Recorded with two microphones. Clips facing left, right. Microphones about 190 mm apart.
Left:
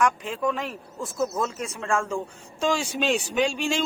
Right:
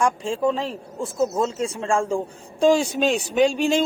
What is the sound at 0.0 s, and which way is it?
A woman's voice, 30° right (ahead or behind).